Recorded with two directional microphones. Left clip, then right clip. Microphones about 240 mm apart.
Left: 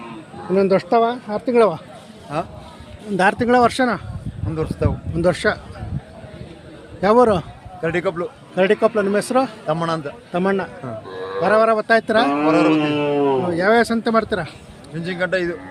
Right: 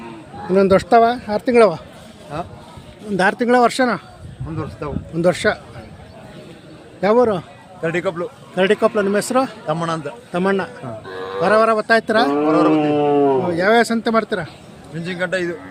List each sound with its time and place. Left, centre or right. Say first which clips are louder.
0.5 s speech: right 3 dB; centre
2.3 s speech: left 3 dB; left
3.2 s speech: even; centre
4.5 s speech: left 5 dB; left
5.1 s speech: right 2 dB; centre
7.0 s speech: left 1 dB; centre
12.5 s speech: even; left
12.9 s a sound: right 3 dB; centre
13.4 s speech: right 1 dB; centre